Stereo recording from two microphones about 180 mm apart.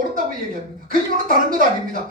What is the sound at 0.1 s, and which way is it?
A woman's voice, 50° right (ahead or behind).